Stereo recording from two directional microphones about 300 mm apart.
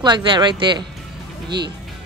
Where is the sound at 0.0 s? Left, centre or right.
Centre.